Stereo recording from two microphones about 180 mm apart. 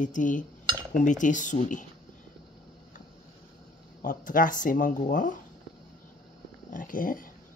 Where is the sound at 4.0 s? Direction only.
50° left (ahead or behind).